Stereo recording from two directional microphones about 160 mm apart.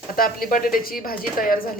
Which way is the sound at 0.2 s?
65° left (ahead or behind).